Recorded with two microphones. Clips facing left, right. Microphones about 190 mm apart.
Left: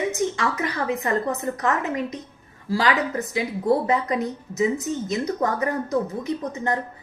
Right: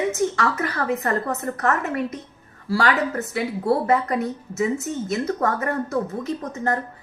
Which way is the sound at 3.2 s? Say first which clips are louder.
Even; 15° left (ahead or behind).